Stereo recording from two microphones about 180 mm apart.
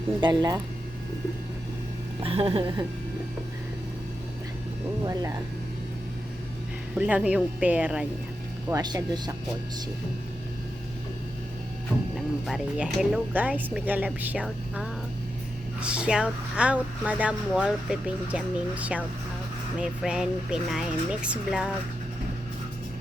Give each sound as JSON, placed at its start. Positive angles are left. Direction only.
{"t": 0.2, "sound": "speech", "side_deg": -25}
{"t": 2.2, "sound": "speech", "side_deg": -30}
{"t": 5.0, "sound": "speech", "side_deg": -20}
{"t": 6.9, "sound": "speech", "side_deg": -5}
{"t": 8.7, "sound": "speech", "side_deg": -20}
{"t": 12.1, "sound": "speech", "side_deg": 0}
{"t": 15.8, "sound": "speech", "side_deg": -5}